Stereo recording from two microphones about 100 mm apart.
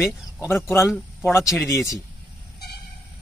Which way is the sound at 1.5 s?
Centre (ahead or behind).